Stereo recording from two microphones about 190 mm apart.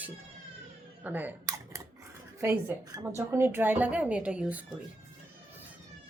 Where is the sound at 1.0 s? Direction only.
10° right (ahead or behind).